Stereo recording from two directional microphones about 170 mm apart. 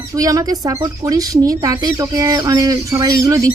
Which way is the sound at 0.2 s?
20° right (ahead or behind).